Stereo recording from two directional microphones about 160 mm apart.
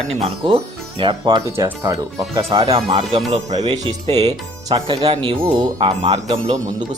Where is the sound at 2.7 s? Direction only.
35° right (ahead or behind).